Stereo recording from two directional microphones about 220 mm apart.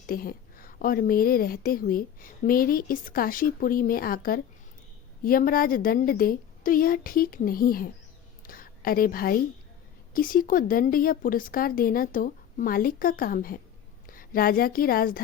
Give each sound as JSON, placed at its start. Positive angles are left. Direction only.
{"t": 0.1, "sound": "a woman's voice", "side_deg": 40}
{"t": 8.4, "sound": "a sound", "side_deg": 40}
{"t": 10.2, "sound": "a woman's voice", "side_deg": 40}